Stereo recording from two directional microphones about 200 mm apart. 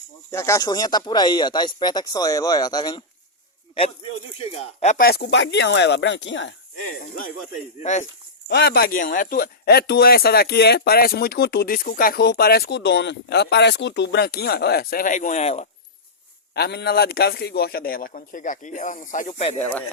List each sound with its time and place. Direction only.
0.3 s speech: 15° left (ahead or behind)
4.4 s speech: 30° left (ahead or behind)
5.0 s speech: 55° left (ahead or behind)
7.8 s speech: 35° left (ahead or behind)
8.4 s speech: 55° left (ahead or behind); by 15.6 s 35° left (ahead or behind)
16.6 s speech: 55° left (ahead or behind); by 19.5 s 30° left (ahead or behind)